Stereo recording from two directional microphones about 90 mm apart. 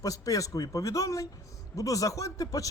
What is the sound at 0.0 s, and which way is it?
Speech, 40° left (ahead or behind).